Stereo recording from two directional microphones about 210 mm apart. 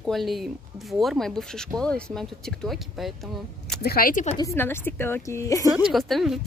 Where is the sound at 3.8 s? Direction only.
45° left (ahead or behind).